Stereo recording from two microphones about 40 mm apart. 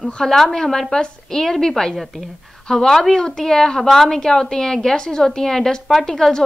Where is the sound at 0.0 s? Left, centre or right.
Centre.